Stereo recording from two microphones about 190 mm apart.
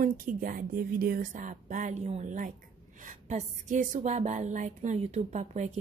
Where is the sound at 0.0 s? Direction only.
45° right (ahead or behind).